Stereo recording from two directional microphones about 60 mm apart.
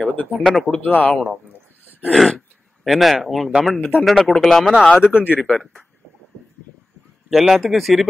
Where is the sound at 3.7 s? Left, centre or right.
Left.